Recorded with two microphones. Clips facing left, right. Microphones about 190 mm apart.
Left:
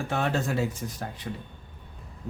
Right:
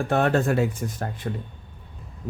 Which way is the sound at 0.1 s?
55° right (ahead or behind).